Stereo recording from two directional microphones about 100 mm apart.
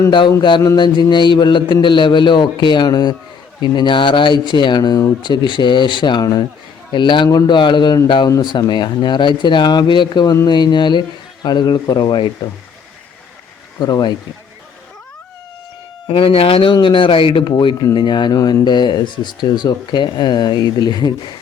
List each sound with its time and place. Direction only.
0.1 s speech: 50° left (ahead or behind)
13.7 s speech: 45° left (ahead or behind)
16.0 s speech: 75° left (ahead or behind)
16.7 s speech: 55° left (ahead or behind)